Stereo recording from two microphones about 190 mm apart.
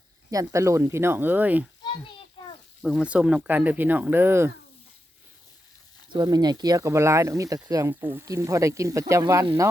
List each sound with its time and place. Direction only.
0.3 s speech: 15° right (ahead or behind)
2.8 s speech: 5° right (ahead or behind)
6.1 s speech: 20° right (ahead or behind)